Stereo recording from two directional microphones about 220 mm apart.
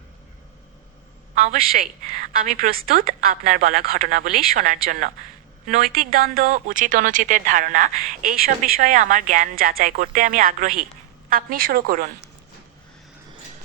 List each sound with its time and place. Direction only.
1.5 s a woman's voice: 40° right (ahead or behind)